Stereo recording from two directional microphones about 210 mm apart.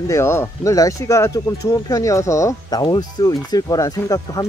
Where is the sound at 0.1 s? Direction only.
10° left (ahead or behind).